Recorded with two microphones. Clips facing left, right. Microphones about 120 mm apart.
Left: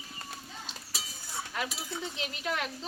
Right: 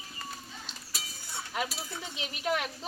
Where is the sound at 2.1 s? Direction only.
15° right (ahead or behind).